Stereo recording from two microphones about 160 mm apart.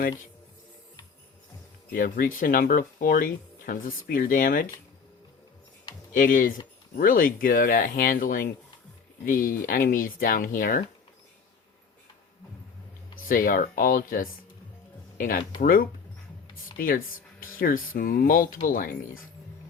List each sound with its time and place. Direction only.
1.9 s speech: 60° left (ahead or behind)
6.1 s speech: 60° left (ahead or behind)
13.2 s speech: 60° left (ahead or behind)
15.6 s speech: 65° left (ahead or behind)